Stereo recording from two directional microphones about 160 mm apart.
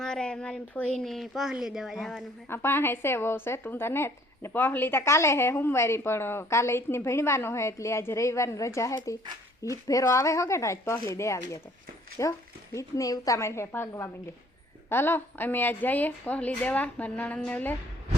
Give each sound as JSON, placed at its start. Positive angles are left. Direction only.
{"t": 0.0, "sound": "speech", "side_deg": 5}
{"t": 2.5, "sound": "a woman's voice", "side_deg": 15}